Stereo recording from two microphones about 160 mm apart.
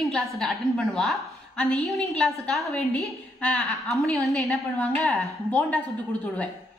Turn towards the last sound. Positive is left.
turn(degrees=10)  # may be behind; listen again after turning